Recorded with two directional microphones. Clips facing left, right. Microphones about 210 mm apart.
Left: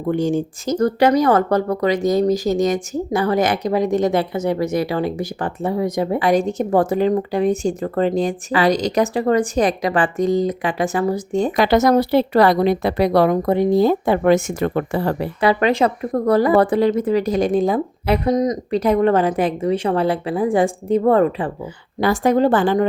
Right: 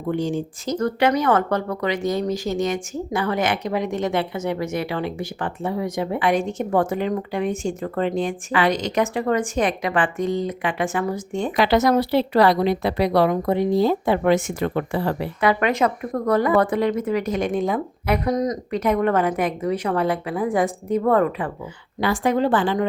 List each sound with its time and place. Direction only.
0.1 s speech: 45° left (ahead or behind)
15.4 s speech: 30° left (ahead or behind)
18.7 s speech: 30° left (ahead or behind)
22.0 s speech: 40° left (ahead or behind)